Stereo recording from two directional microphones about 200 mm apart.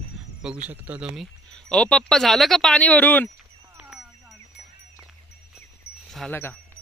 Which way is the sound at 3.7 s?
5° right (ahead or behind).